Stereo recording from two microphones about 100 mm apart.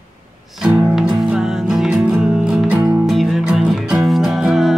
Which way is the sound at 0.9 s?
5° right (ahead or behind).